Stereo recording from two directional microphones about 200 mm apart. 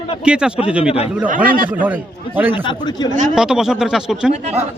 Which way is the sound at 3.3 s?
5° right (ahead or behind).